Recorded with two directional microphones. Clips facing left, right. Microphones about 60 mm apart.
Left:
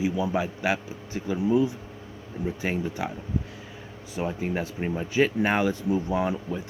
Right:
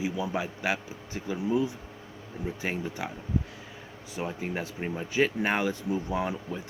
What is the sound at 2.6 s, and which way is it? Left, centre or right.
Speech, left.